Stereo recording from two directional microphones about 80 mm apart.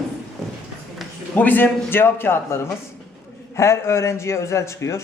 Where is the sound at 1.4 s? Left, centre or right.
Left.